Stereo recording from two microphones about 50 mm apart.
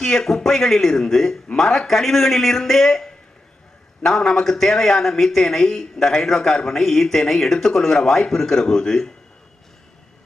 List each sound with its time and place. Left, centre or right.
0.0 s speech: centre